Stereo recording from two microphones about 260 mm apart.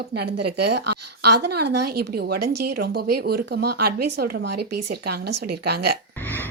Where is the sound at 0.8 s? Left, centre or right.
Right.